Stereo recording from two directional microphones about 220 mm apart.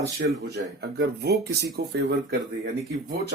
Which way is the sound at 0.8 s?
50° right (ahead or behind).